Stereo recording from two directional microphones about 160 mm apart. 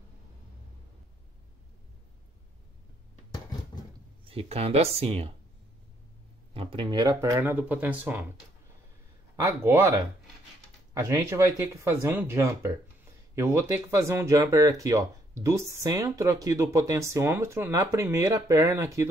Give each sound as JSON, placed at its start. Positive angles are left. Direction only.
{"t": 4.3, "sound": "speech", "side_deg": -40}
{"t": 6.5, "sound": "speech", "side_deg": -35}
{"t": 9.6, "sound": "speech", "side_deg": -15}